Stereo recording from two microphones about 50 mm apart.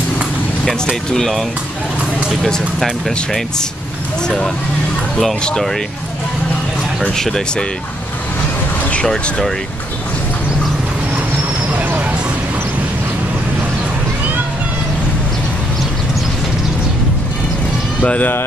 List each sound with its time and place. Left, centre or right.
0.7 s speech: centre
2.4 s speech: centre
7.2 s speech: centre
18.0 s speech: left